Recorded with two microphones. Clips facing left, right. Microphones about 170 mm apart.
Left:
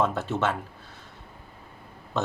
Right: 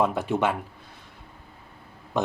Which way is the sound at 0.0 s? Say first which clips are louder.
Right 2 dB; 15° right (ahead or behind).